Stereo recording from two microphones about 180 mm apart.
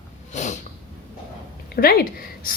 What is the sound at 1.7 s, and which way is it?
Speech, 55° left (ahead or behind).